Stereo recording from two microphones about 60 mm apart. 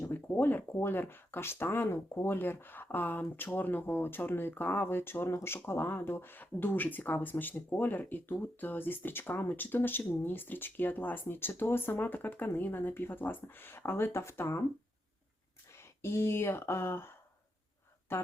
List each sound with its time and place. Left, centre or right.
0.1 s speech: left
15.8 s speech: left